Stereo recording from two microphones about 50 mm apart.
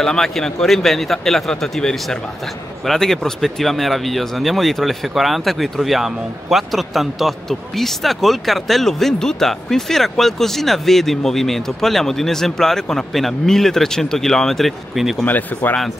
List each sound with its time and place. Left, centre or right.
0.0 s a man's voice: centre
15.2 s speech: left